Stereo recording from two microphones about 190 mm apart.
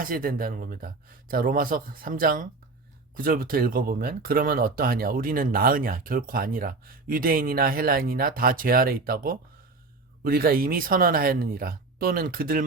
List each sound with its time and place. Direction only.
0.0 s speech: 50° right (ahead or behind)